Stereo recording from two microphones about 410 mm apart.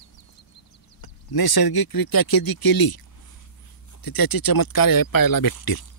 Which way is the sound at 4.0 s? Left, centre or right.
Left.